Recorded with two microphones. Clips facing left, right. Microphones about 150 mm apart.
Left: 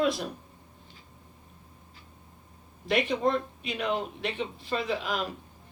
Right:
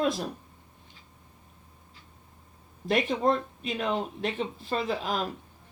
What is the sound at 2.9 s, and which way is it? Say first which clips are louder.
Speech: right 1 dB; 40° right (ahead or behind).